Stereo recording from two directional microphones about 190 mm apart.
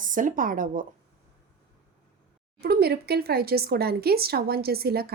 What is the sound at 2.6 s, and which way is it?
A woman's voice, 55° right (ahead or behind).